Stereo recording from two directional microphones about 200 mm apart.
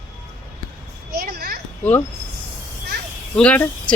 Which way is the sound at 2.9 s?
55° right (ahead or behind).